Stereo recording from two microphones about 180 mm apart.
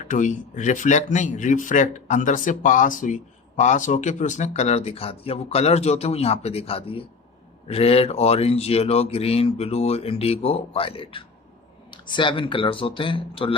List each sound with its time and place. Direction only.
0.1 s a man's voice: 45° left (ahead or behind)